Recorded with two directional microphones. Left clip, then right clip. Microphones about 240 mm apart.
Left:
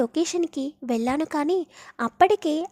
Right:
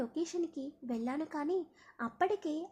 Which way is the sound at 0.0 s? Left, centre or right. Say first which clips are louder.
Left 12 dB; left.